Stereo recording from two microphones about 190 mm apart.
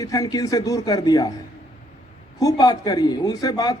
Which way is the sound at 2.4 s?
20° left (ahead or behind).